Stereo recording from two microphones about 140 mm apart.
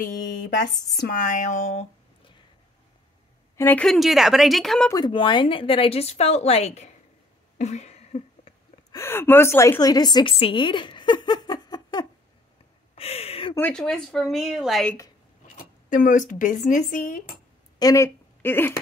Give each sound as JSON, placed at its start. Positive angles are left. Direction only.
{"t": 0.9, "sound": "speech", "side_deg": 85}
{"t": 3.5, "sound": "speech", "side_deg": 15}
{"t": 4.9, "sound": "speech", "side_deg": 35}
{"t": 7.5, "sound": "a sound", "side_deg": 50}
{"t": 8.9, "sound": "speech", "side_deg": 15}
{"t": 10.4, "sound": "a sound", "side_deg": 35}
{"t": 12.9, "sound": "a sound", "side_deg": 45}
{"t": 13.6, "sound": "speech", "side_deg": 10}
{"t": 15.5, "sound": "speech", "side_deg": 75}
{"t": 17.7, "sound": "speech", "side_deg": 25}